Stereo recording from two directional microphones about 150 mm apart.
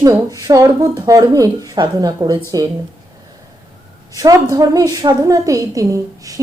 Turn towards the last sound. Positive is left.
turn(degrees=-20)  # may be behind; listen again after turning